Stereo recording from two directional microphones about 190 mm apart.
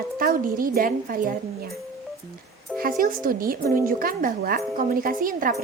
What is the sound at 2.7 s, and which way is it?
A woman's voice, 50° right (ahead or behind).